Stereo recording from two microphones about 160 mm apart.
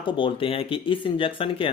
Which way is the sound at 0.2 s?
35° left (ahead or behind).